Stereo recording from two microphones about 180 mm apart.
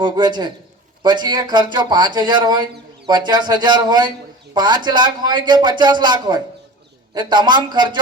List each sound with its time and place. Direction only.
0.0 s a man's voice: 25° right (ahead or behind)